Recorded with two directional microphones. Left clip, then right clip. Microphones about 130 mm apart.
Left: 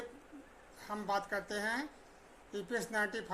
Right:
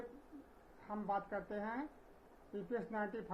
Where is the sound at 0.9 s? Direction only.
35° left (ahead or behind).